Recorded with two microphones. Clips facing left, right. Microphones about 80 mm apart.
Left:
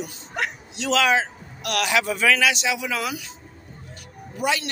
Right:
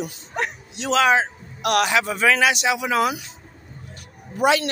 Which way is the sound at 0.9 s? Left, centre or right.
Right.